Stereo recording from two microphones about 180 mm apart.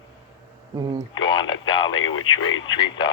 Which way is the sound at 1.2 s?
25° left (ahead or behind).